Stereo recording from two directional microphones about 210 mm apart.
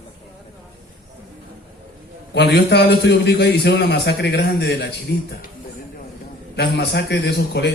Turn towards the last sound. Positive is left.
turn(degrees=50)  # may be behind; listen again after turning